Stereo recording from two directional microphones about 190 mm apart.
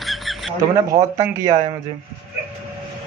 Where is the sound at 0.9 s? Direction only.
20° right (ahead or behind).